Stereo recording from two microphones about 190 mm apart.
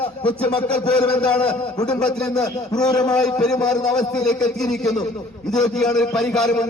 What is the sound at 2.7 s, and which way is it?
Speech, 20° left (ahead or behind).